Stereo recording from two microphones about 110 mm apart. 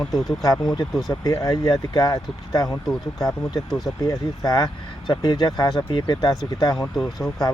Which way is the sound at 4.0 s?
35° left (ahead or behind).